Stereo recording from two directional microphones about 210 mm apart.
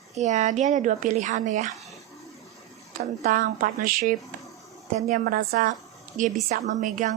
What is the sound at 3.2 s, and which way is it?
A woman's voice, 40° right (ahead or behind).